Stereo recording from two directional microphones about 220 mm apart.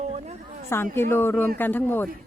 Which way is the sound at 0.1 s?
30° right (ahead or behind).